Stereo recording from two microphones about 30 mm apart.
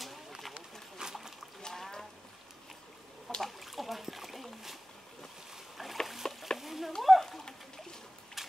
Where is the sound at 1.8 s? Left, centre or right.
Centre.